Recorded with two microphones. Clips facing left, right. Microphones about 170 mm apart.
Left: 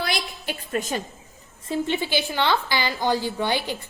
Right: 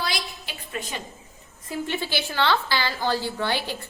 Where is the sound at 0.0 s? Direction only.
50° left (ahead or behind).